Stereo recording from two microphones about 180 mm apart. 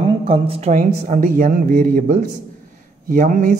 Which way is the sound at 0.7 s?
45° right (ahead or behind).